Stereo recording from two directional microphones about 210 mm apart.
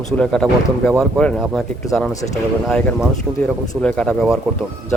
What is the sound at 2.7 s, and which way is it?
Speech, 5° left (ahead or behind).